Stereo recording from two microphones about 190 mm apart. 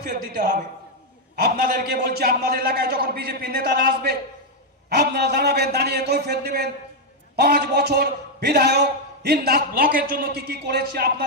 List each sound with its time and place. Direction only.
0.0 s a man's voice: 45° right (ahead or behind)